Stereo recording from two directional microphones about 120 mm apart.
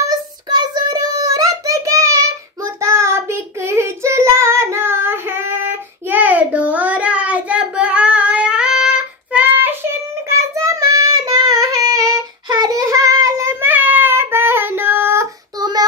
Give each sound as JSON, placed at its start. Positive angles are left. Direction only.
{"t": 0.1, "sound": "child singing", "side_deg": -35}